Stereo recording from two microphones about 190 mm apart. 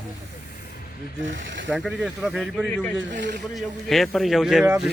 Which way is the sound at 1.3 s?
75° right (ahead or behind).